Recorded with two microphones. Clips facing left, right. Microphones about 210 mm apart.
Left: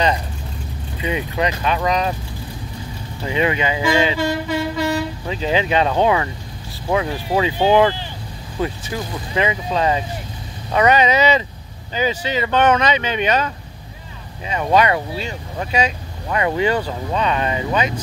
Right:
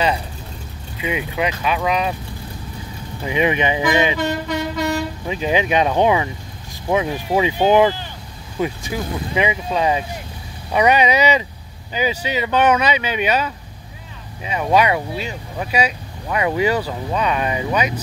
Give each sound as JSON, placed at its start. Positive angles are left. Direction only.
{"t": 1.0, "sound": "speech", "side_deg": -10}
{"t": 3.3, "sound": "speech", "side_deg": -15}
{"t": 4.2, "sound": "a sound", "side_deg": 5}
{"t": 5.3, "sound": "speech", "side_deg": -15}